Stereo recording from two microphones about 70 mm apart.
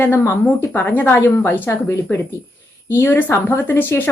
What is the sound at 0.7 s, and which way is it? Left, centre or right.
A woman's voice, left.